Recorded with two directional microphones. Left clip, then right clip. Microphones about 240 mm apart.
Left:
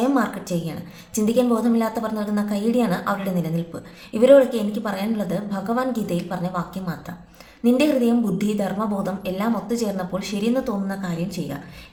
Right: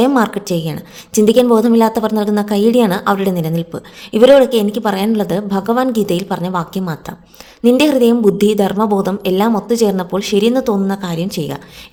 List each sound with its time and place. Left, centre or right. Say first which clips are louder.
0.0 s a woman's voice: right 8 dB; right